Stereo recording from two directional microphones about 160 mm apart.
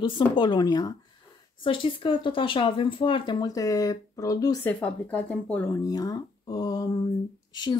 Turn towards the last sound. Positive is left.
turn(degrees=30)  # may be behind; listen again after turning